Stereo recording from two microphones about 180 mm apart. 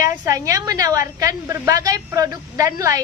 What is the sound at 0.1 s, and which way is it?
A woman's voice, 15° right (ahead or behind).